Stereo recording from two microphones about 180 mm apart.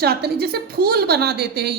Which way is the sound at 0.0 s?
60° right (ahead or behind).